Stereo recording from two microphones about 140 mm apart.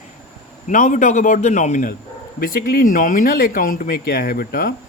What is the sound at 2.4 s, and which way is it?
Speech, 90° left.